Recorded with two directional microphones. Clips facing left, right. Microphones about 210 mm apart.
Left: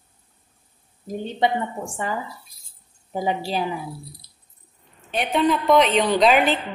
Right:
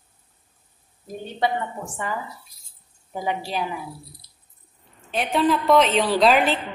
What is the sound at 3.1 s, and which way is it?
Speech, 30° left (ahead or behind).